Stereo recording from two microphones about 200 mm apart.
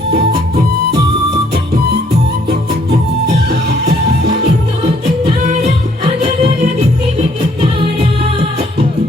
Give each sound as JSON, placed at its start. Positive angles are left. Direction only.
{"t": 3.5, "sound": "music", "side_deg": -55}
{"t": 6.1, "sound": "music", "side_deg": -35}